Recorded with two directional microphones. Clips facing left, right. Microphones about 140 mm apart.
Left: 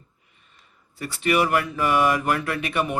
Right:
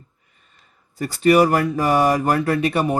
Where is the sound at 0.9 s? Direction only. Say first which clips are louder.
Right 7 dB; 40° right (ahead or behind).